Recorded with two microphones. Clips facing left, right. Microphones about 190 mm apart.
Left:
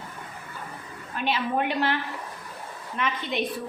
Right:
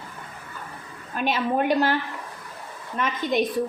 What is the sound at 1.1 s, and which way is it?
Speech, 45° right (ahead or behind).